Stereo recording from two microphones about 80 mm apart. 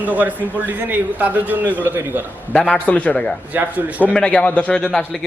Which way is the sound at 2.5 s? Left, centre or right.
Centre.